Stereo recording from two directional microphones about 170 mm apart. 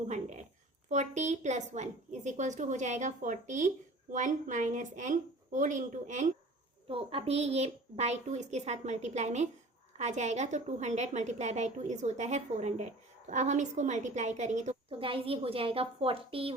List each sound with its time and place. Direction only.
0.1 s a sound: 45° right (ahead or behind)
0.9 s a woman's voice: 45° right (ahead or behind)
6.8 s a woman's voice: 35° right (ahead or behind)
14.8 s a woman's voice: 30° right (ahead or behind)